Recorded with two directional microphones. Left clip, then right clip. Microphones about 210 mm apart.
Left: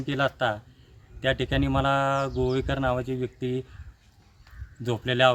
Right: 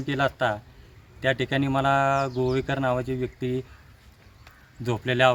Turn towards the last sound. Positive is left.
turn(degrees=5)  # may be behind; listen again after turning